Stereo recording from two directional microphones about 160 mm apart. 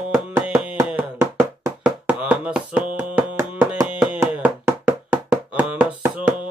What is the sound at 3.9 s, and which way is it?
Knock, 10° right (ahead or behind).